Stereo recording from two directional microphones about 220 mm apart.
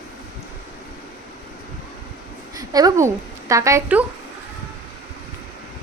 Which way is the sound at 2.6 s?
15° right (ahead or behind).